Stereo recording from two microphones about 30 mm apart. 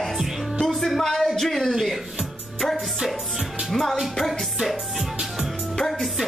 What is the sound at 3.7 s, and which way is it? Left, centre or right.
Music, centre.